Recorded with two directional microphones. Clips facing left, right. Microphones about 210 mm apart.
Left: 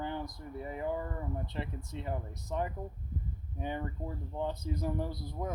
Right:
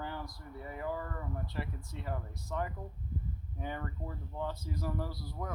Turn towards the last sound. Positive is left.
turn(degrees=20)  # may be behind; listen again after turning